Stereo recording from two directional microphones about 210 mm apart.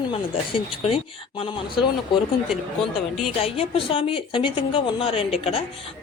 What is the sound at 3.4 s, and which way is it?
A woman's voice, 25° left (ahead or behind).